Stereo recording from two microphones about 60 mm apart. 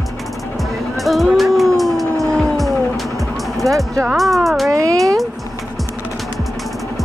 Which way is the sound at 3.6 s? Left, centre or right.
Right.